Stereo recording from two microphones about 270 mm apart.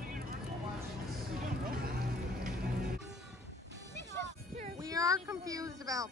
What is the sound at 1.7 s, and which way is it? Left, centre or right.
Music, right.